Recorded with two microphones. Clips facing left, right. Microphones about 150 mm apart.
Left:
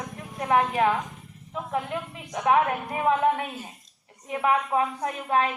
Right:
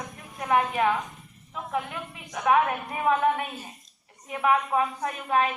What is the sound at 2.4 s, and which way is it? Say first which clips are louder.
A woman's voice: even; 25° left (ahead or behind).